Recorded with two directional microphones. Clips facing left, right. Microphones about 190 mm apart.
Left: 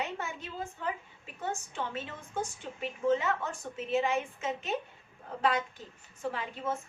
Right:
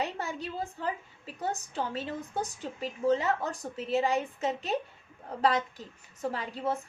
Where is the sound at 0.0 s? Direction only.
35° right (ahead or behind).